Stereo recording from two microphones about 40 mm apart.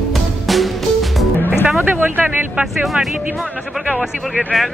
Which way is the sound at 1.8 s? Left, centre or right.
Right.